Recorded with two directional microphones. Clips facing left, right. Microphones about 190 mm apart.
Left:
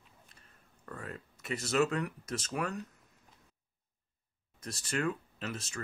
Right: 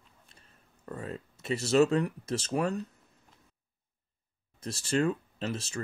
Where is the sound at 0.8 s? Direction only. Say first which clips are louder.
Right 5 dB; 25° right (ahead or behind).